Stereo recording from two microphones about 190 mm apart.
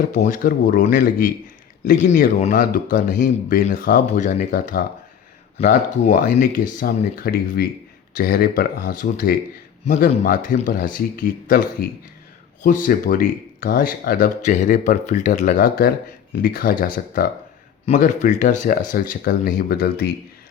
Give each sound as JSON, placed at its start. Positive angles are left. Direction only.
{"t": 0.1, "sound": "speech", "side_deg": 40}